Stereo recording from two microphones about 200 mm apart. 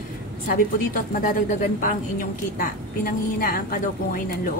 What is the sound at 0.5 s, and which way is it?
A woman's voice, 45° left (ahead or behind).